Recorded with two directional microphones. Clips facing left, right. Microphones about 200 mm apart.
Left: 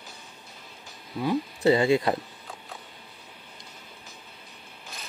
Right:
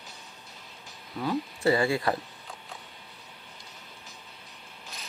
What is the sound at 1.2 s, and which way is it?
Speech, 20° left (ahead or behind).